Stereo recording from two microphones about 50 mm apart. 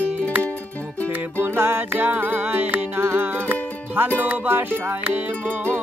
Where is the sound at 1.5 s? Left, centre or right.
Right.